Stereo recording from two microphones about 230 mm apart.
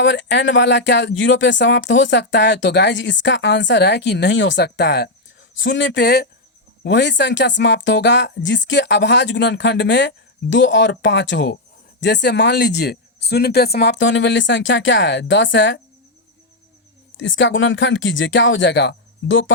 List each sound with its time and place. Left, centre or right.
0.0 s speech: left
17.2 s speech: left